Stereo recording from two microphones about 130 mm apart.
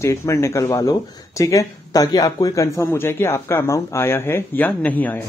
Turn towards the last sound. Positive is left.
turn(degrees=15)  # may be behind; listen again after turning